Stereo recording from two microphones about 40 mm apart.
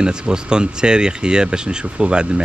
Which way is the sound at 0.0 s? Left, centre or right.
Centre.